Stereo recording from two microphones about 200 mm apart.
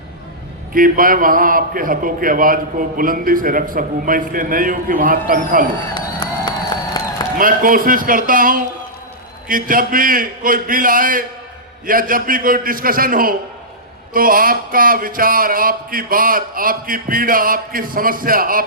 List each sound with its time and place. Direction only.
0.7 s a man's voice: 45° right (ahead or behind)
5.9 s a sound: 20° left (ahead or behind)
7.3 s a man's voice: 45° right (ahead or behind)